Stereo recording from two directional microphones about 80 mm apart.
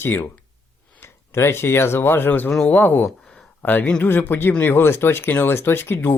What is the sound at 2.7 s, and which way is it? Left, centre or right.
Speech, left.